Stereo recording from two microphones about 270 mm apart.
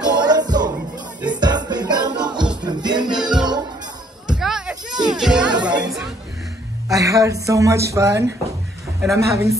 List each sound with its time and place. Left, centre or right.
0.0 s music: centre
4.3 s a sound: centre
4.9 s music: centre
5.2 s music: centre
6.9 s speech: centre